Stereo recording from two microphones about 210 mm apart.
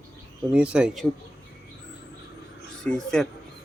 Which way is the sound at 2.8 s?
5° left (ahead or behind).